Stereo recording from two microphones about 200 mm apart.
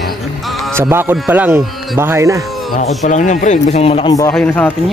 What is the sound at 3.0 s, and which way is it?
Speech, 35° left (ahead or behind).